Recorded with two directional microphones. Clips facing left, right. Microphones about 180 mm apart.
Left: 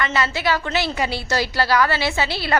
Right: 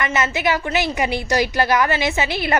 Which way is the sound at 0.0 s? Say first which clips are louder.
Right 1 dB; 20° right (ahead or behind).